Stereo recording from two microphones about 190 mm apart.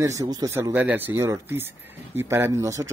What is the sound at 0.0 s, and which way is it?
A man's voice, 15° right (ahead or behind).